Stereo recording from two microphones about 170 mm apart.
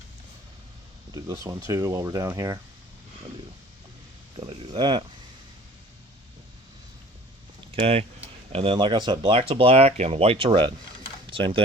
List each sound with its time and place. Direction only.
1.1 s speech: 20° right (ahead or behind)
4.4 s speech: 30° right (ahead or behind)
7.7 s speech: 35° right (ahead or behind)